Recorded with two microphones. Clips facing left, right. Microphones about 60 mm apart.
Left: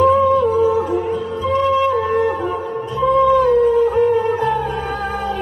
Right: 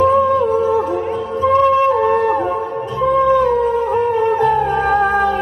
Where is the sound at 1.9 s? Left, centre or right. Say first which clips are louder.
Right 3 dB; right.